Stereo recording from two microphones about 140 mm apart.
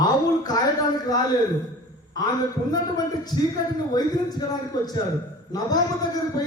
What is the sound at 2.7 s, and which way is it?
A woman's voice, 30° left (ahead or behind).